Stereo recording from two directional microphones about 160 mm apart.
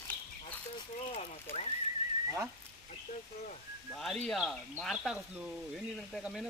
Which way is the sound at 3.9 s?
Centre (ahead or behind).